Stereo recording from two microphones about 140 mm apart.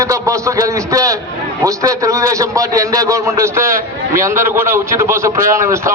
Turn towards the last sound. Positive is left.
turn(degrees=-20)  # may be behind; listen again after turning